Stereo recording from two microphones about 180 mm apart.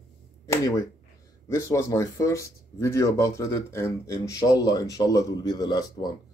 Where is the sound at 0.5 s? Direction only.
15° left (ahead or behind).